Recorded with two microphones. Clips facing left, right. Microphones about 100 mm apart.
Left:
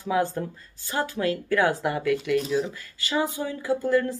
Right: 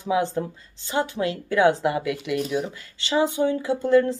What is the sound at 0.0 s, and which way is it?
Speech, 20° right (ahead or behind).